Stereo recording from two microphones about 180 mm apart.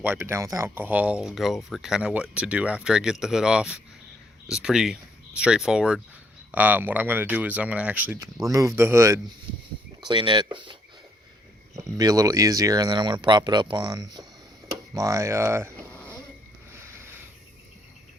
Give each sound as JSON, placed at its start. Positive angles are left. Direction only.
{"t": 0.0, "sound": "speech", "side_deg": -10}
{"t": 10.0, "sound": "speech", "side_deg": -25}
{"t": 11.8, "sound": "speech", "side_deg": -20}
{"t": 16.8, "sound": "a sound", "side_deg": -15}